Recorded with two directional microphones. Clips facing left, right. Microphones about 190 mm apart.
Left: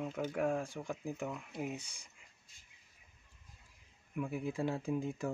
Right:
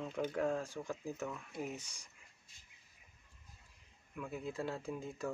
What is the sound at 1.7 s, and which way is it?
Speech, 60° left (ahead or behind).